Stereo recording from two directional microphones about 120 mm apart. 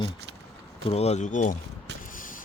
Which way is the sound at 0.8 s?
60° left (ahead or behind).